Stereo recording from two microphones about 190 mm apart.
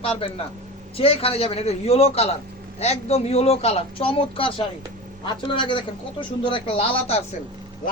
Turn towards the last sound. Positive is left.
turn(degrees=30)  # may be behind; listen again after turning